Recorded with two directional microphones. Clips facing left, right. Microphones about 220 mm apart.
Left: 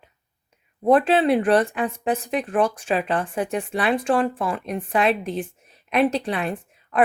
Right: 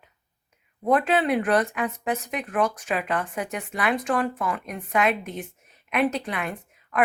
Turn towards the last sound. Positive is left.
turn(degrees=30)  # may be behind; listen again after turning